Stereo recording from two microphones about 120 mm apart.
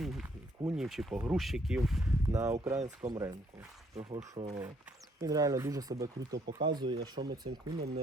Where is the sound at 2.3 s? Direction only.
20° right (ahead or behind).